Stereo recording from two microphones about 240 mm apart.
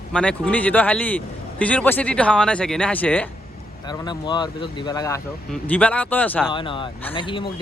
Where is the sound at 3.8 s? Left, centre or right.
Centre.